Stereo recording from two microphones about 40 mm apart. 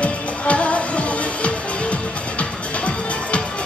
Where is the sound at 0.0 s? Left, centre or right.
Left.